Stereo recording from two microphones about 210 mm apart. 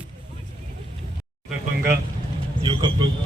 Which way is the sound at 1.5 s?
10° right (ahead or behind).